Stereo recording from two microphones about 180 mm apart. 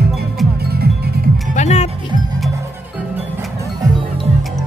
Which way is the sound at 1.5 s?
40° left (ahead or behind).